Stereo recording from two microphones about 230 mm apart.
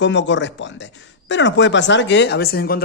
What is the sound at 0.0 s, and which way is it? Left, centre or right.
Speech, left.